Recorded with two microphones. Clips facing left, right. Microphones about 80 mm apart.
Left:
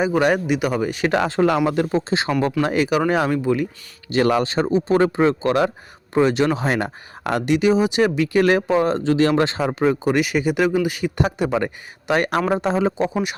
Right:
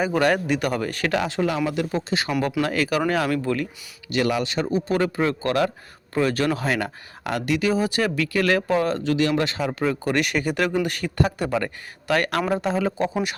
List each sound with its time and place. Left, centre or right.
0.1 s speech: centre
1.2 s speech: left; by 3.7 s centre
4.1 s speech: left